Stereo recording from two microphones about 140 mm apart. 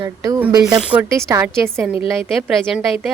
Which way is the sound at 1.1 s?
20° right (ahead or behind).